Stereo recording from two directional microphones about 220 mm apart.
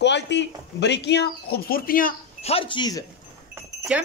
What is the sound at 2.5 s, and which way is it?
Speech, 25° left (ahead or behind).